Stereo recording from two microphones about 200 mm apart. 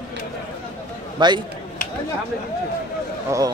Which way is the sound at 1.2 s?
25° right (ahead or behind).